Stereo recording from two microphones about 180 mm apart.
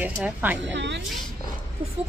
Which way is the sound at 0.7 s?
75° right (ahead or behind).